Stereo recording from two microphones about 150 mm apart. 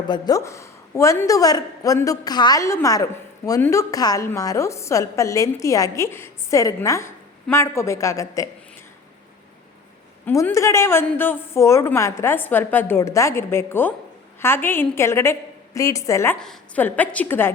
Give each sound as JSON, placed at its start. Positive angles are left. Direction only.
{"t": 0.1, "sound": "a woman's voice", "side_deg": 25}
{"t": 10.2, "sound": "a woman's voice", "side_deg": 15}
{"t": 16.4, "sound": "a woman's voice", "side_deg": 5}